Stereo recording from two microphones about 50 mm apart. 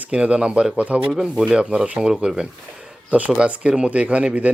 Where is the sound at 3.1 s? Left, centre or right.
Right.